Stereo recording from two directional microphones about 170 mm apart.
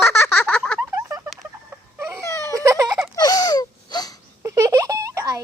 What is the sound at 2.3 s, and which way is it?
Baby cry, 15° left (ahead or behind).